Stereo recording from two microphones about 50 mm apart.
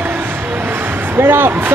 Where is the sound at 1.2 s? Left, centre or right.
Right.